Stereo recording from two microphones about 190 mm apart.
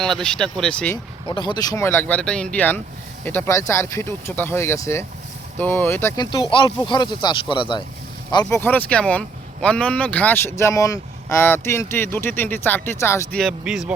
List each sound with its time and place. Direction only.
0.0 s speech: 5° left (ahead or behind)
1.3 s speech: 25° left (ahead or behind)
13.4 s speech: centre (ahead or behind)